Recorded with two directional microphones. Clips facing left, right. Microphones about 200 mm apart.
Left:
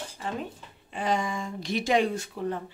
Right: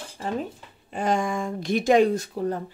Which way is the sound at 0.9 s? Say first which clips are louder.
Right 4 dB; 50° right (ahead or behind).